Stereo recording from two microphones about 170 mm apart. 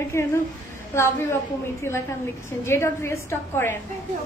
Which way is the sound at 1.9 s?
15° left (ahead or behind).